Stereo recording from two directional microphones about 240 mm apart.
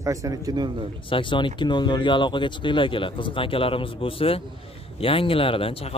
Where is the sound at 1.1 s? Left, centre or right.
Left.